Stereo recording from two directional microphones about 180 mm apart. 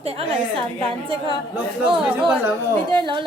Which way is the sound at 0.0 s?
35° right (ahead or behind).